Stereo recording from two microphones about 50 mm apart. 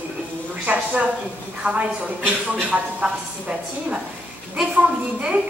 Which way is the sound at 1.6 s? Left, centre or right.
Right.